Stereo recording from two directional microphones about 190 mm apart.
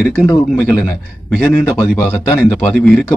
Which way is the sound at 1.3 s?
5° left (ahead or behind).